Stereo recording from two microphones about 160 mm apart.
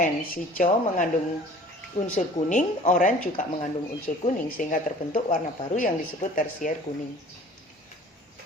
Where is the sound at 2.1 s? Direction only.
50° left (ahead or behind).